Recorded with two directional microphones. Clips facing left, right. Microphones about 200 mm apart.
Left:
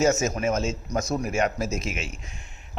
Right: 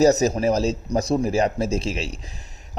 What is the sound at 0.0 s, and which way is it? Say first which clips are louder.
A man's voice: right 5 dB; 35° right (ahead or behind).